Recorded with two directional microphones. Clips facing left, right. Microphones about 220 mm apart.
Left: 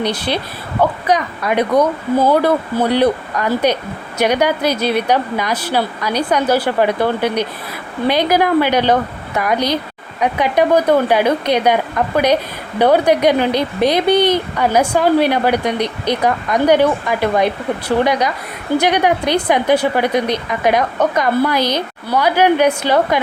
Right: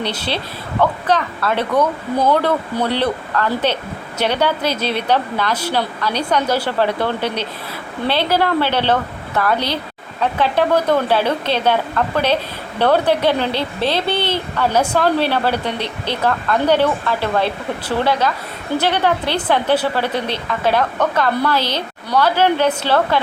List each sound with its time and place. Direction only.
0.0 s a woman's voice: 15° left (ahead or behind)